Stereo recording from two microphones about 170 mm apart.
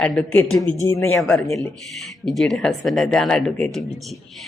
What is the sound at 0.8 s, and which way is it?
Speech, 15° left (ahead or behind).